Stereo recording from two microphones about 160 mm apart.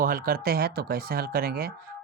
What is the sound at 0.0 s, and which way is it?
Speech, 65° right (ahead or behind).